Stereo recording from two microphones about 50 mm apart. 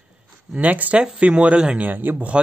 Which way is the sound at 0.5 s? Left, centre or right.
Right.